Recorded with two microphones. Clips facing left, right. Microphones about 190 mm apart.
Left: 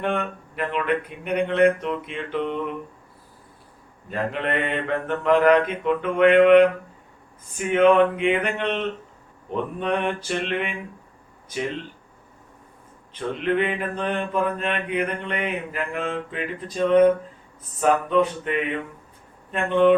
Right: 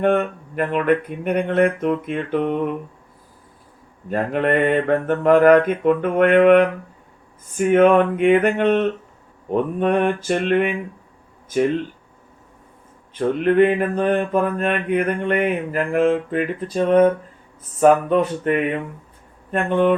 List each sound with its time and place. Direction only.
0.0 s mantra: 45° right (ahead or behind)
4.1 s mantra: 50° right (ahead or behind)
13.1 s mantra: 50° right (ahead or behind)